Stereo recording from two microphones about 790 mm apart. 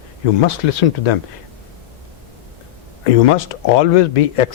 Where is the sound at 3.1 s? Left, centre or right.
Left.